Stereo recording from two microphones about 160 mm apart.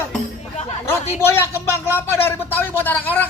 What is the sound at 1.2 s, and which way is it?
A man's voice, 15° left (ahead or behind).